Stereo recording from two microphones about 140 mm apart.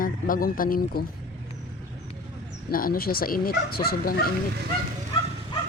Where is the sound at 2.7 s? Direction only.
90° left.